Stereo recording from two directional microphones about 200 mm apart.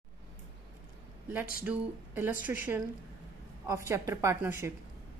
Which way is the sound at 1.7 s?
10° right (ahead or behind).